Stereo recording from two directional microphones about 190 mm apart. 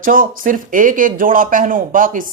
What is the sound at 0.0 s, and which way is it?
Speech, 45° right (ahead or behind).